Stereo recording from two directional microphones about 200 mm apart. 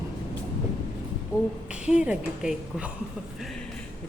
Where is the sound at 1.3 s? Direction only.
15° left (ahead or behind).